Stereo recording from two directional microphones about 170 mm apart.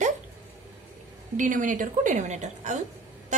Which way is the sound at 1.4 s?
50° right (ahead or behind).